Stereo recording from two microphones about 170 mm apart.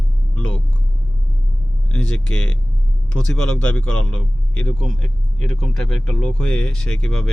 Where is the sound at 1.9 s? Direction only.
5° left (ahead or behind).